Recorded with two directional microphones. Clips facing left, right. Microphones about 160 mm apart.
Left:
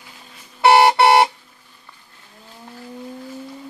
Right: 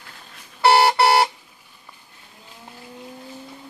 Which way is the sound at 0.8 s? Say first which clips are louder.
Left 4 dB; 25° left (ahead or behind).